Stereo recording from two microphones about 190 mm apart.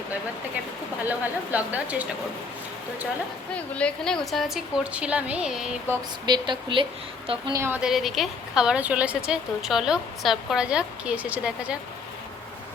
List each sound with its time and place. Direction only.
1.0 s a woman's voice: 10° right (ahead or behind)
3.5 s a woman's voice: 5° left (ahead or behind)
5.9 s speech: 20° right (ahead or behind)
7.5 s a woman's voice: 10° right (ahead or behind)